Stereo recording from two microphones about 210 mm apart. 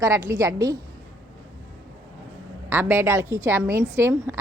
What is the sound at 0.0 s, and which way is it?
Speech, 15° right (ahead or behind).